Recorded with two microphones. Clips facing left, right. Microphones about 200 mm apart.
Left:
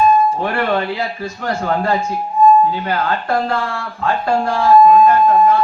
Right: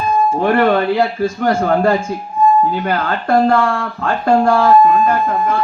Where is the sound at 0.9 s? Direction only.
50° right (ahead or behind).